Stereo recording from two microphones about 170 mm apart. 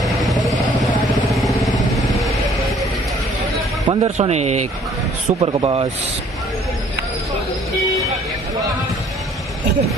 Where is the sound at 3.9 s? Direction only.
40° right (ahead or behind).